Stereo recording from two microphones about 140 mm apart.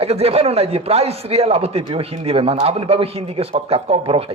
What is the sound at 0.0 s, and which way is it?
Speech, 45° right (ahead or behind).